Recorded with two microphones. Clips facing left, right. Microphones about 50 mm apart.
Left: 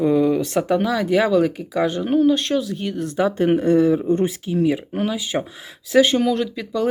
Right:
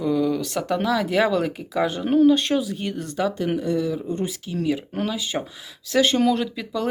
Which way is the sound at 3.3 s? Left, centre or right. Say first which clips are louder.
Left 9 dB; left.